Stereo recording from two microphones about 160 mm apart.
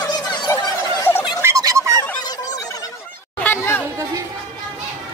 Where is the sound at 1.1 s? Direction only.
15° left (ahead or behind).